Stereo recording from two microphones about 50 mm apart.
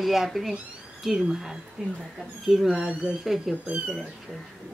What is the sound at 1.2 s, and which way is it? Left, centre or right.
A woman's voice, centre.